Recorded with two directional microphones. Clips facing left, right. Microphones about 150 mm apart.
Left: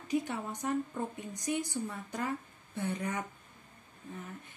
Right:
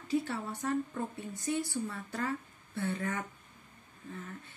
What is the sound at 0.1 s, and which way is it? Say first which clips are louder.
Speech: even; 15° left (ahead or behind).